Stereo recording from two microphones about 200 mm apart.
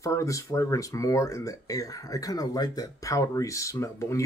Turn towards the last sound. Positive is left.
turn(degrees=15)  # may be behind; listen again after turning